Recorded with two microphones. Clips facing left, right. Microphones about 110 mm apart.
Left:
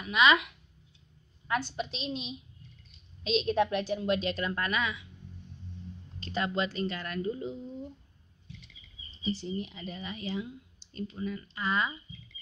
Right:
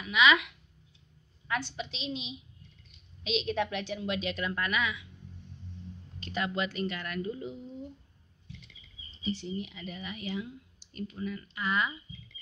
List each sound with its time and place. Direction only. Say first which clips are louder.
0.0 s speech: left 1 dB; 40° left (ahead or behind)
1.5 s a woman's voice: left 3 dB; 45° left (ahead or behind)
6.1 s speech: left 2 dB; 30° left (ahead or behind)
9.2 s speech: left 1 dB; 35° left (ahead or behind)